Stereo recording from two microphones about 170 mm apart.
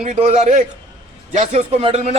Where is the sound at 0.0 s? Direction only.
45° right (ahead or behind).